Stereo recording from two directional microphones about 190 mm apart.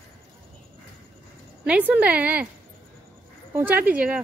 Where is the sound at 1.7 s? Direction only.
5° right (ahead or behind).